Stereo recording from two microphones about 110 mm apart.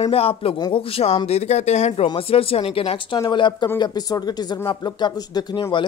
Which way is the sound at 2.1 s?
60° left (ahead or behind).